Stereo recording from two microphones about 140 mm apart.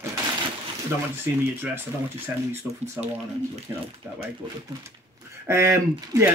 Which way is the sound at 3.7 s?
20° right (ahead or behind).